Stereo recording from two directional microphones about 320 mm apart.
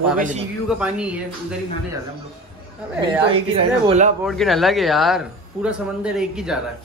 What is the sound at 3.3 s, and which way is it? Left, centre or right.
Speech, centre.